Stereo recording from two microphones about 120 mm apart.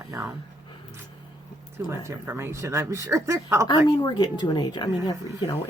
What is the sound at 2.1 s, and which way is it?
Speech, 20° right (ahead or behind).